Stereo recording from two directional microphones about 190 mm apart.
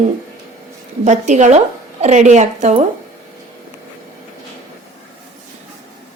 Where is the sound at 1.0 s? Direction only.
35° right (ahead or behind).